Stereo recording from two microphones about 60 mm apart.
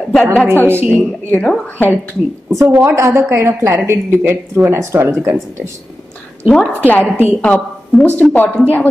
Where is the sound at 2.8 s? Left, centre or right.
Right.